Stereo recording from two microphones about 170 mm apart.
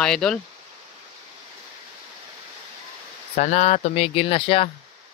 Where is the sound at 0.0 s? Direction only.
5° left (ahead or behind).